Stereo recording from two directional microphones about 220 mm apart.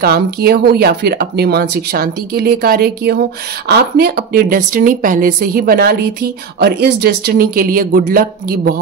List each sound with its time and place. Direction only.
0.0 s speech: 45° right (ahead or behind)